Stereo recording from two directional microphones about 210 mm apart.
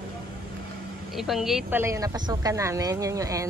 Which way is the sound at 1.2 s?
Centre (ahead or behind).